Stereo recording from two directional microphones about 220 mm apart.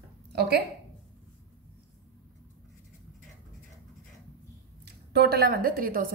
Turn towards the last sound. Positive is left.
turn(degrees=-40)  # may be behind; listen again after turning